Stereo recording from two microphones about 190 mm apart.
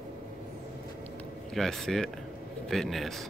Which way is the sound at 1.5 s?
Centre (ahead or behind).